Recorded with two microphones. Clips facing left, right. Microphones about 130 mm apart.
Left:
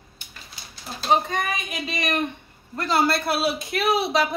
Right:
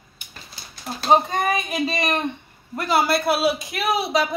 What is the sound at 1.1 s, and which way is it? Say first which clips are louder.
Speech: right 4 dB; 35° right (ahead or behind).